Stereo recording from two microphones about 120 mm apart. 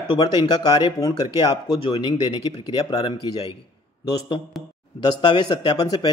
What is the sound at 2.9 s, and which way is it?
Speech, 40° left (ahead or behind).